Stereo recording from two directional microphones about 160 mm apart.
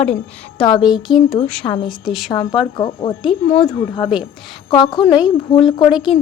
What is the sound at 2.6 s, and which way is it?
Speech, 30° left (ahead or behind).